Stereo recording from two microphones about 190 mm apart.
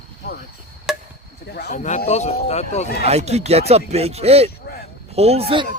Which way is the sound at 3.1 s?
35° right (ahead or behind).